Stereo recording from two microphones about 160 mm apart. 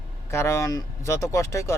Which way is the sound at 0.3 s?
15° left (ahead or behind).